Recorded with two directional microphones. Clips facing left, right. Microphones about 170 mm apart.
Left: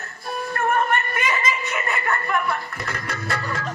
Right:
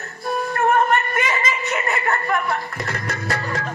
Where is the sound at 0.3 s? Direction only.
45° right (ahead or behind).